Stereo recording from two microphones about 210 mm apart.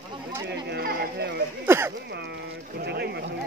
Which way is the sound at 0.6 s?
50° right (ahead or behind).